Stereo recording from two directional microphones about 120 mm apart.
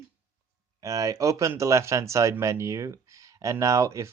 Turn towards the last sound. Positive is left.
turn(degrees=-25)  # may be behind; listen again after turning